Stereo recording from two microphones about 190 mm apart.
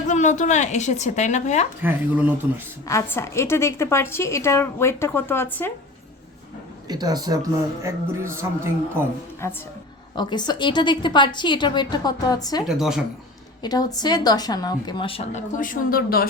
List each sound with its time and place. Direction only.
0.1 s speech: 40° left (ahead or behind)
1.8 s speech: 10° right (ahead or behind)
2.8 s a woman's voice: 15° left (ahead or behind)
6.8 s speech: 20° right (ahead or behind)
9.4 s a woman's voice: 15° left (ahead or behind)
12.6 s speech: centre (ahead or behind)
13.6 s speech: 20° left (ahead or behind); by 16.2 s 50° left (ahead or behind)